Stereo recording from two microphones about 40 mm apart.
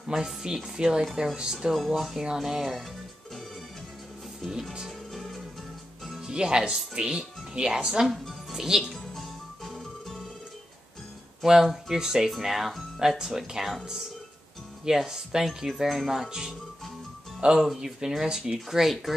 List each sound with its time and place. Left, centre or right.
0.1 s speech: centre
2.0 s speech: centre
2.4 s speech: centre
4.4 s speech: centre
4.8 s music: centre
6.2 s speech: centre
8.9 s music: centre
11.4 s speech: centre
13.2 s speech: centre
14.9 s speech: centre
16.3 s speech: centre
17.4 s speech: right
17.7 s speech: centre